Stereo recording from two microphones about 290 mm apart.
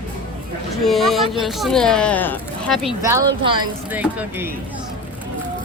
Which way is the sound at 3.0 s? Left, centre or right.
Centre.